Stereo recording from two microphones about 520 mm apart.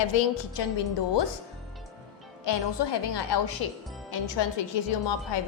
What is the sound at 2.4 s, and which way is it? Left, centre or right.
A woman's voice, left.